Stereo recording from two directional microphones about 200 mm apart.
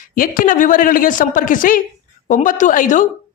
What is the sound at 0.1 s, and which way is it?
A woman's voice, 45° left (ahead or behind).